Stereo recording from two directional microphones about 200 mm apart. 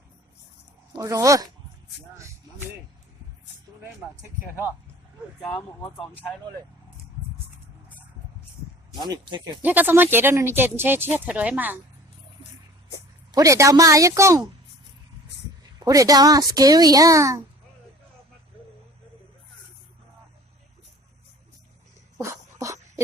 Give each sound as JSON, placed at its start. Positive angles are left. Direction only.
{"t": 0.9, "sound": "speech", "side_deg": -15}
{"t": 6.0, "sound": "speech", "side_deg": 10}
{"t": 9.0, "sound": "speech", "side_deg": -20}
{"t": 9.6, "sound": "speech", "side_deg": -10}
{"t": 13.3, "sound": "speech", "side_deg": -15}
{"t": 15.8, "sound": "speech", "side_deg": -15}
{"t": 22.2, "sound": "dog", "side_deg": -15}